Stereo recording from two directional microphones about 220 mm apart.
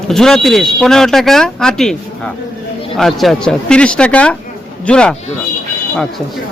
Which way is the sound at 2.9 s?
Centre (ahead or behind).